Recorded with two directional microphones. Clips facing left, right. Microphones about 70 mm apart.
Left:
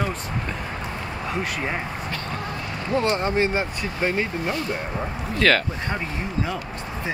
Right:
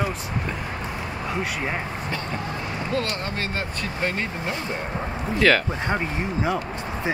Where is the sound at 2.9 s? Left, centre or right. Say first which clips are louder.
Left 7 dB; left.